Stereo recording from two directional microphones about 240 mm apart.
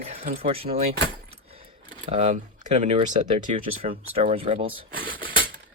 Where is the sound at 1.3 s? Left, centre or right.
Right.